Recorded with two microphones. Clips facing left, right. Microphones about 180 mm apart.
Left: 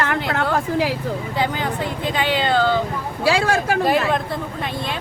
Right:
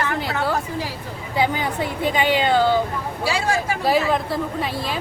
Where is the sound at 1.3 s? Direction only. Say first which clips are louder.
Right 4 dB; 10° right (ahead or behind).